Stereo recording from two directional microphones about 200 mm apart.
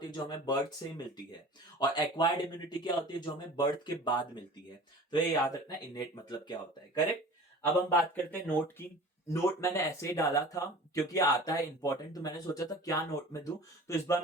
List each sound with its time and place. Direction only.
0.0 s speech: 20° left (ahead or behind)
5.1 s speech: 20° left (ahead or behind)
7.9 s speech: 10° left (ahead or behind)